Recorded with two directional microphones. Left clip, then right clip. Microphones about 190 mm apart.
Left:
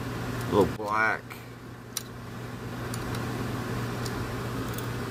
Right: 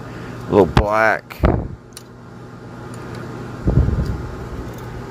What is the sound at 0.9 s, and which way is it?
Speech, 40° right (ahead or behind).